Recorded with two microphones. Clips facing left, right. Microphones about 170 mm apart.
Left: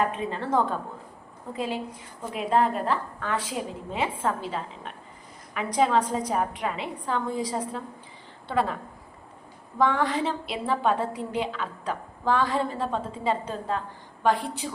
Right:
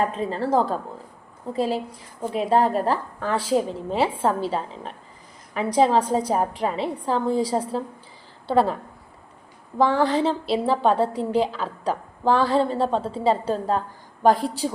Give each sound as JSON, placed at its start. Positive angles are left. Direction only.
{"t": 0.0, "sound": "a woman's voice", "side_deg": -35}
{"t": 9.7, "sound": "a woman's voice", "side_deg": -30}